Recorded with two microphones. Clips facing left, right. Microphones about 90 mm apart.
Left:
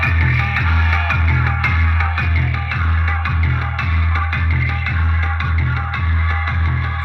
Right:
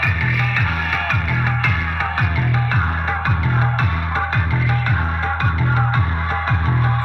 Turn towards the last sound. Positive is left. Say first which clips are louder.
# right 4 dB
turn(degrees=-35)  # may be behind; listen again after turning